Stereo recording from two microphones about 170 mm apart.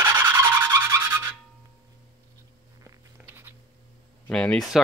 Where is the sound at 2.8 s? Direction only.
15° right (ahead or behind).